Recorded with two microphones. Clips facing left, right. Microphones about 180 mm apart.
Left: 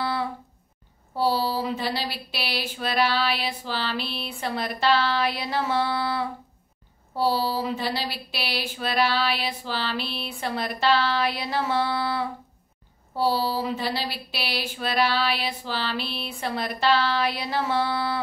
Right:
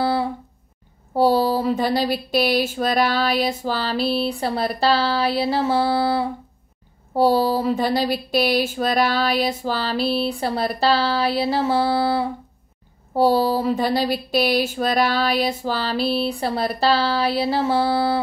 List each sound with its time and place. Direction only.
0.0 s a sound: 30° right (ahead or behind)
1.1 s speech: 45° right (ahead or behind); by 6.2 s 30° right (ahead or behind)
7.2 s speech: 45° right (ahead or behind)
13.1 s speech: 50° right (ahead or behind); by 18.2 s 30° right (ahead or behind)